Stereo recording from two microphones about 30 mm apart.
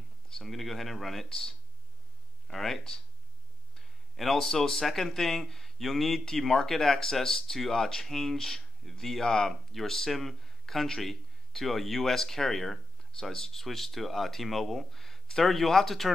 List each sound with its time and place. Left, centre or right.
0.3 s speech: centre
2.4 s speech: centre
4.4 s speech: centre
13.2 s speech: centre